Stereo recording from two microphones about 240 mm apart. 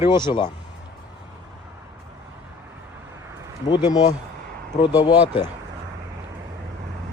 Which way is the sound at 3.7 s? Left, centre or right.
Centre.